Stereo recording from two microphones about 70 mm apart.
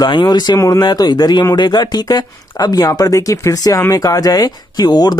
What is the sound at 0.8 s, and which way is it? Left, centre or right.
A man's voice, left.